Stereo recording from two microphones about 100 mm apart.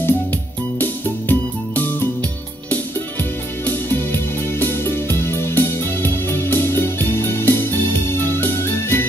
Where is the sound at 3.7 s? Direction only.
20° left (ahead or behind).